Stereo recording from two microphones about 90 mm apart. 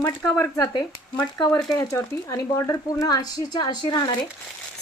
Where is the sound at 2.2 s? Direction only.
40° left (ahead or behind).